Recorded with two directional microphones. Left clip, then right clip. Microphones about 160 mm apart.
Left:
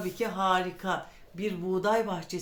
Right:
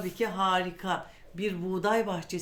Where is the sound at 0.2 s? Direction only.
50° right (ahead or behind).